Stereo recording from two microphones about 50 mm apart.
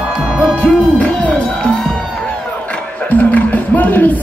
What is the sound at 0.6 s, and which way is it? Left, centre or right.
Hoot, left.